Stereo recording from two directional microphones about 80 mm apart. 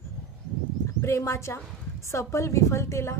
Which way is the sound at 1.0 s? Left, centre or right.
Left.